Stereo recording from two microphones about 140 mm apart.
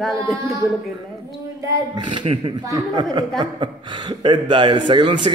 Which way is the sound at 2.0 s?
35° right (ahead or behind).